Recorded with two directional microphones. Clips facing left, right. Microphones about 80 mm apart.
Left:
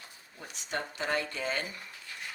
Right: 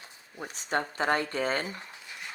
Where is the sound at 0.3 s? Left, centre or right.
Right.